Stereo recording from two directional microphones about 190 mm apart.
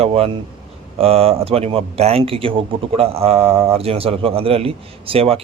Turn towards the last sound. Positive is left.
turn(degrees=-30)  # may be behind; listen again after turning